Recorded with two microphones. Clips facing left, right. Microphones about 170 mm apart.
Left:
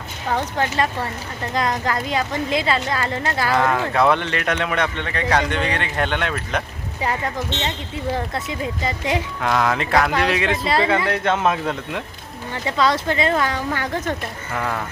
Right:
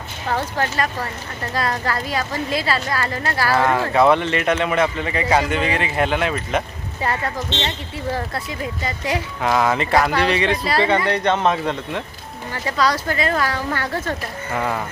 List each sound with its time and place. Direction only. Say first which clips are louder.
0.6 s a woman's voice: left 1 dB; 20° left (ahead or behind)
3.5 s speech: right 2 dB; 5° right (ahead or behind)
7.0 s a woman's voice: even; 15° left (ahead or behind)
9.4 s speech: right 3 dB; 5° right (ahead or behind)
12.6 s a woman's voice: left 1 dB; 25° left (ahead or behind)
14.5 s speech: right 2 dB; 5° right (ahead or behind)